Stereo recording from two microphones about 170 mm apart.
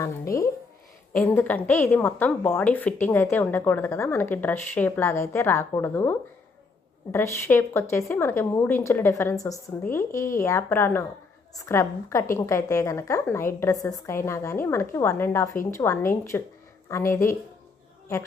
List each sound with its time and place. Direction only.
0.0 s a woman's voice: 20° left (ahead or behind)